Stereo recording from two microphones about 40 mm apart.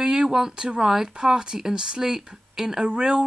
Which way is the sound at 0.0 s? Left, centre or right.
Centre.